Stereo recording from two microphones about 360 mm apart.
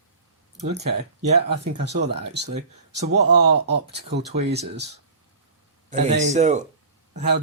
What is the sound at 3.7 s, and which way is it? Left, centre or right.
Speech, right.